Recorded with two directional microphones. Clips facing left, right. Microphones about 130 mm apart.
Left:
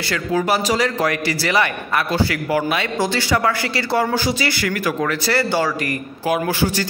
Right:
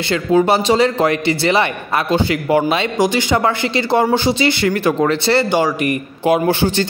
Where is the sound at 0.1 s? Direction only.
25° right (ahead or behind).